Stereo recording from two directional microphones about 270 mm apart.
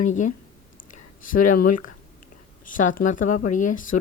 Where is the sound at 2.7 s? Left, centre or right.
Left.